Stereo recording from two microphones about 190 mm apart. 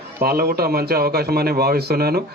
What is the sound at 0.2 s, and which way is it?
A man's voice, 50° right (ahead or behind).